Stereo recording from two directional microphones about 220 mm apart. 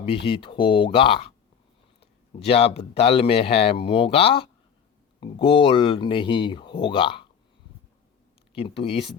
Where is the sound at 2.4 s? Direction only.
25° left (ahead or behind).